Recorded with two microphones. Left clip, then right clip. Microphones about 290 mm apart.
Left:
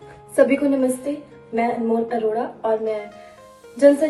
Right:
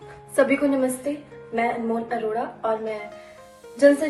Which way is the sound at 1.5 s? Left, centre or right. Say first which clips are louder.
Left 3 dB; centre.